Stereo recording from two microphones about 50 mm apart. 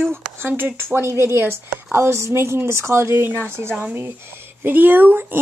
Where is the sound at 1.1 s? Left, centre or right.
Right.